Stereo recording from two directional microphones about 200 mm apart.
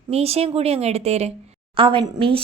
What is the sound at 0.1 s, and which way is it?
A woman's voice, 30° right (ahead or behind).